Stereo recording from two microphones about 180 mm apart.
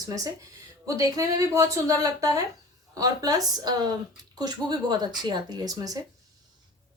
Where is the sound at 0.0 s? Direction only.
20° right (ahead or behind).